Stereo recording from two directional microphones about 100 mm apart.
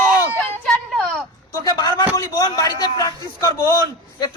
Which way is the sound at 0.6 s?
5° left (ahead or behind).